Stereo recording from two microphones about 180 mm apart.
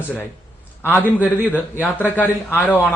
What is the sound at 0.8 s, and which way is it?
A man's voice, 10° left (ahead or behind).